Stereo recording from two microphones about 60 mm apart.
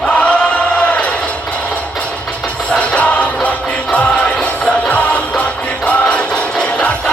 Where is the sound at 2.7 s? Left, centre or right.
Left.